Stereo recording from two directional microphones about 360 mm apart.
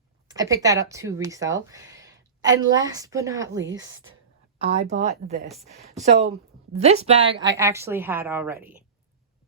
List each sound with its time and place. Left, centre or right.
0.3 s speech: centre
3.7 s a woman's voice: right
4.5 s a woman's voice: centre